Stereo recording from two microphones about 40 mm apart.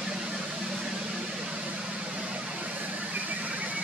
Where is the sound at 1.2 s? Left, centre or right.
Right.